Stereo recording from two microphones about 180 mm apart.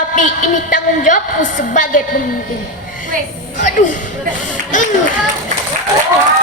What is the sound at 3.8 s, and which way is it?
Speech, 45° left (ahead or behind).